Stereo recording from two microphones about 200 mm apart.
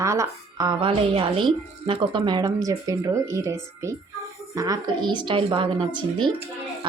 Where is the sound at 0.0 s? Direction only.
15° right (ahead or behind).